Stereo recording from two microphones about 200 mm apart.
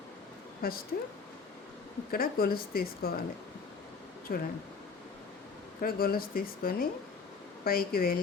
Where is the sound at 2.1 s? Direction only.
50° left (ahead or behind).